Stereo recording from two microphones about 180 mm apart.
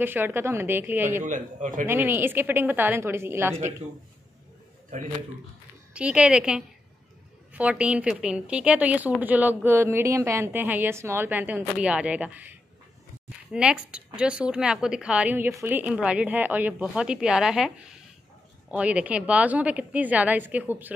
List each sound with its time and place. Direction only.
0.0 s a woman's voice: 10° right (ahead or behind)
1.2 s a man's voice: 45° right (ahead or behind)
1.9 s a woman's voice: 10° right (ahead or behind)
5.9 s a woman's voice: 5° right (ahead or behind)